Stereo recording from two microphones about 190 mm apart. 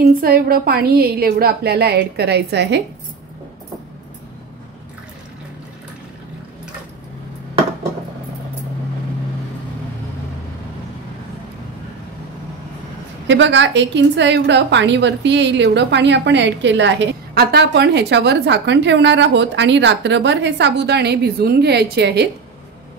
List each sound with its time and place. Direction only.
0.2 s a woman's voice: 50° right (ahead or behind)
13.3 s a woman's voice: 70° right (ahead or behind)